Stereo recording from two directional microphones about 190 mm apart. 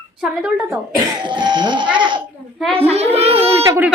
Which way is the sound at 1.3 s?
25° right (ahead or behind).